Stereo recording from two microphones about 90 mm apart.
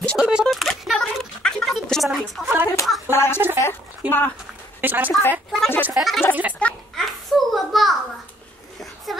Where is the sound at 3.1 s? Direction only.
25° left (ahead or behind).